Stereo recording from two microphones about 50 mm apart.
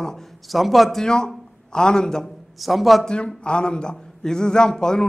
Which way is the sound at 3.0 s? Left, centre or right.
Centre.